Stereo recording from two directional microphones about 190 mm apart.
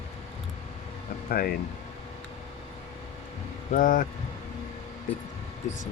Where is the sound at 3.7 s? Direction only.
45° left (ahead or behind).